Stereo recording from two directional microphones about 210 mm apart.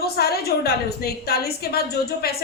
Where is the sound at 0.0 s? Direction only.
50° left (ahead or behind).